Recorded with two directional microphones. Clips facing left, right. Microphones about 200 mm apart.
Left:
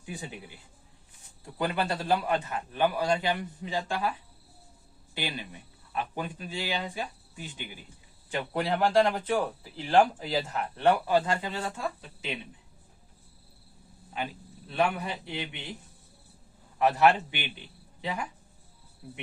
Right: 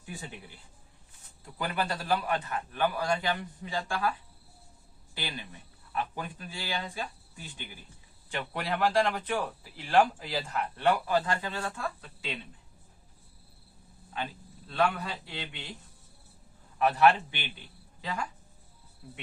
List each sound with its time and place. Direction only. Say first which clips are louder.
0.0 s speech: left 3 dB; 15° left (ahead or behind)
1.5 s a man's voice: left 3 dB; 25° left (ahead or behind)
5.1 s a man's voice: left 4 dB; 20° left (ahead or behind)
14.7 s a man's voice: left 1 dB; 20° left (ahead or behind)
16.7 s a man's voice: left 1 dB; 20° left (ahead or behind)